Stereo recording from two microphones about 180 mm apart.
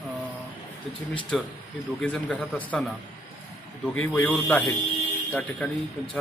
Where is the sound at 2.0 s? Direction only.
5° left (ahead or behind).